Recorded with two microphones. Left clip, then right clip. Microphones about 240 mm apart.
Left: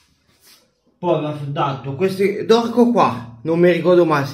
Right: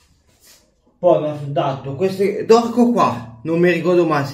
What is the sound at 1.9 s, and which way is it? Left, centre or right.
Speech, left.